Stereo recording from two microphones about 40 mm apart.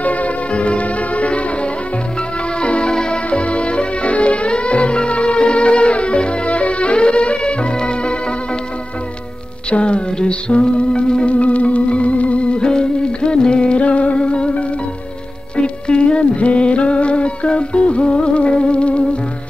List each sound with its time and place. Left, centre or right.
0.0 s music: left
3.3 s music: left
9.7 s music: left